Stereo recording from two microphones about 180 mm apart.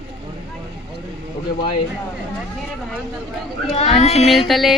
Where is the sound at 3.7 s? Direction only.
35° left (ahead or behind).